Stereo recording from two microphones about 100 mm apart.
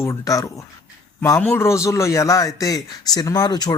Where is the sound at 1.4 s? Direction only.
25° left (ahead or behind).